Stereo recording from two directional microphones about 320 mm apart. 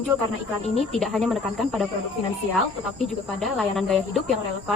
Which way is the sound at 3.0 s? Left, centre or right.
Centre.